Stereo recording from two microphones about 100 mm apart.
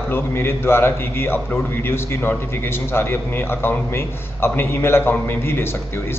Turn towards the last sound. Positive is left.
turn(degrees=25)  # may be behind; listen again after turning